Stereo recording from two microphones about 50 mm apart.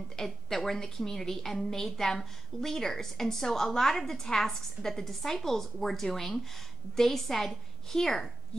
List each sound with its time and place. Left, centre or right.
0.1 s a woman's voice: centre